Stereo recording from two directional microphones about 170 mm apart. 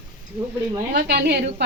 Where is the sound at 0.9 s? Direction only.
75° right (ahead or behind).